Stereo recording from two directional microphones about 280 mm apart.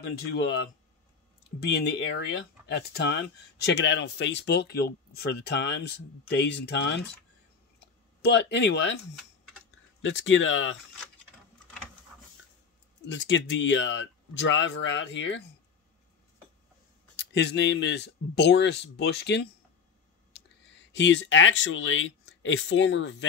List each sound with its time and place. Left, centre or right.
0.0 s speech: left
8.2 s speech: left
10.0 s speech: left
13.0 s speech: left
17.2 s speech: left